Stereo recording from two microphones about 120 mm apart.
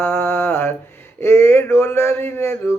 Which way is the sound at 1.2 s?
20° left (ahead or behind).